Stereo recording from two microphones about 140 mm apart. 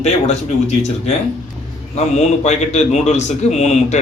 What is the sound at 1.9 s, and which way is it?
A man's voice, 55° left (ahead or behind).